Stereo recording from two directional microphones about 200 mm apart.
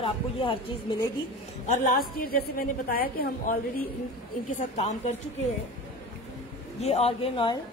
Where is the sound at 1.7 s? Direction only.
45° left (ahead or behind).